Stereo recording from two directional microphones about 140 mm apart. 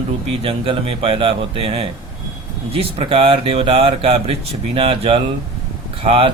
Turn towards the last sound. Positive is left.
turn(degrees=-45)  # may be behind; listen again after turning